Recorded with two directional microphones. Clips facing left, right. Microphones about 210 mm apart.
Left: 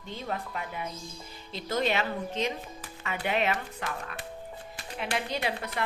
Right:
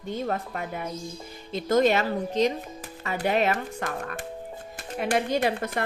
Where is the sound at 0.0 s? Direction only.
45° right (ahead or behind).